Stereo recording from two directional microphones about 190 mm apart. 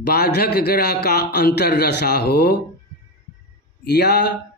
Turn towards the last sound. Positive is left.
turn(degrees=60)  # may be behind; listen again after turning